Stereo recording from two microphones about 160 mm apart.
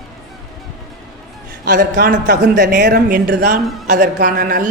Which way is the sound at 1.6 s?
60° right (ahead or behind).